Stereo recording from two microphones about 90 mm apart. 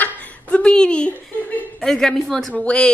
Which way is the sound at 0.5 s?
10° left (ahead or behind).